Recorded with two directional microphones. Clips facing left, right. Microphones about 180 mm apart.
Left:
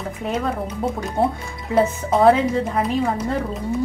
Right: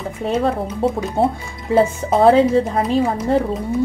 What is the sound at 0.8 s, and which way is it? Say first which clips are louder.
Speech: right 6 dB; 30° right (ahead or behind).